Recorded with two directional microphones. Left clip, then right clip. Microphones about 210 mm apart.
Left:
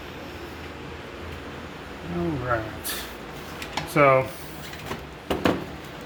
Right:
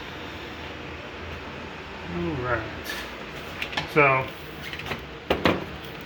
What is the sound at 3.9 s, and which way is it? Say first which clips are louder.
Speech: left 2 dB; 50° left (ahead or behind).